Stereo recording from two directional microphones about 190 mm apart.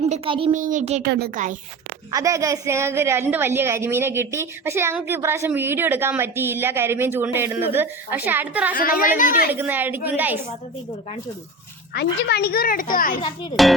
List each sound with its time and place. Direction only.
0.0 s a child's voice: 30° right (ahead or behind)
0.5 s a child's voice: 40° right (ahead or behind)
1.0 s speech: 55° right (ahead or behind)
2.0 s a woman's voice: 15° right (ahead or behind)
8.7 s a child's voice: 45° left (ahead or behind)
9.5 s a woman's voice: 10° right (ahead or behind)
11.9 s a child's voice: 60° left (ahead or behind)
13.6 s speech: centre (ahead or behind)